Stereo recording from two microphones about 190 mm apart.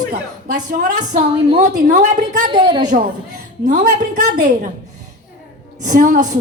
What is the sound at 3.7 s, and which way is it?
Speech, 40° right (ahead or behind).